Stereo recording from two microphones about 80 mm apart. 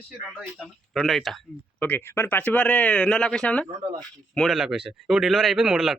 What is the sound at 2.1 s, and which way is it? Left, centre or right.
Speech, left.